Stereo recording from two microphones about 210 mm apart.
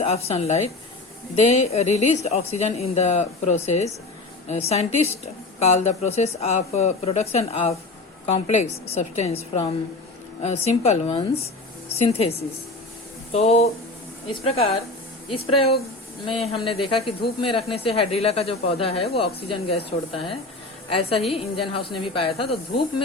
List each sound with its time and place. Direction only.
0.0 s speech: 30° left (ahead or behind)
16.9 s speech: 25° left (ahead or behind)